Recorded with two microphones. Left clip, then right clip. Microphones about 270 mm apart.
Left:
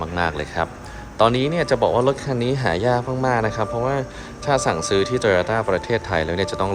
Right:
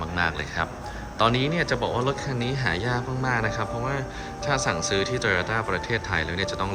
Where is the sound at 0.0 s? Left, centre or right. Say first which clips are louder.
Left 3 dB; centre.